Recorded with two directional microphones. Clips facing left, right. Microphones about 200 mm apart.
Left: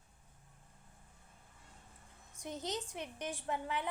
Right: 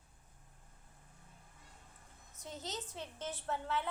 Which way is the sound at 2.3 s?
15° left (ahead or behind).